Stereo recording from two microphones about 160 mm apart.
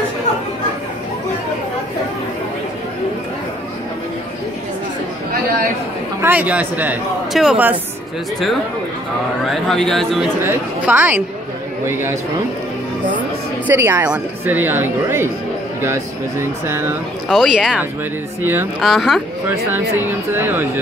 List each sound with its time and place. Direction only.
6.2 s speech: 10° right (ahead or behind)
9.4 s speech: centre (ahead or behind)
10.4 s speech: 15° right (ahead or behind)
13.7 s speech: 15° right (ahead or behind)
17.3 s speech: centre (ahead or behind)
18.8 s speech: centre (ahead or behind)
19.7 s speech: 15° right (ahead or behind)